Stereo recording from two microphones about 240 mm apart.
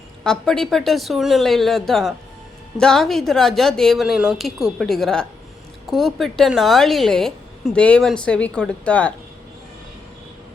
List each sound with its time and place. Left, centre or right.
0.3 s a woman's voice: centre